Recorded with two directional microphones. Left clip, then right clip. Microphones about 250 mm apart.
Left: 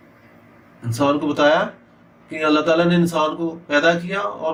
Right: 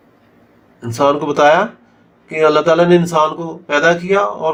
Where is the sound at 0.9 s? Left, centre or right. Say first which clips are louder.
Right 6 dB; right.